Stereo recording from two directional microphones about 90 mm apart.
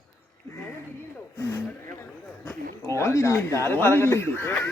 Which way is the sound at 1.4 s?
30° left (ahead or behind).